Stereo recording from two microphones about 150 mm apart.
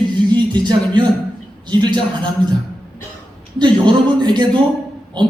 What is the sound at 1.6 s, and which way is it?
Speech, 30° right (ahead or behind).